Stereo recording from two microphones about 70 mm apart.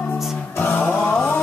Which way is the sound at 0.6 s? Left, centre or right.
Left.